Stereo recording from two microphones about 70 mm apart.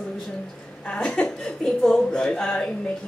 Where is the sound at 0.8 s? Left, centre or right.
Centre.